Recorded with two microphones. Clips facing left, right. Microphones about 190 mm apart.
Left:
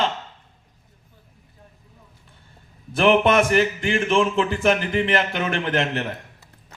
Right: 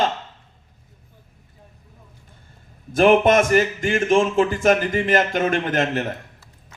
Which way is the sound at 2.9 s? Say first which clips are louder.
Right 2 dB; 45° right (ahead or behind).